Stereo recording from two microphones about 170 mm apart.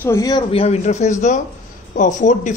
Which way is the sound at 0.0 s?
20° left (ahead or behind).